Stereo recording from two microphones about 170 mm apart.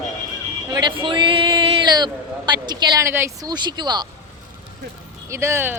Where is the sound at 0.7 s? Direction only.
25° right (ahead or behind).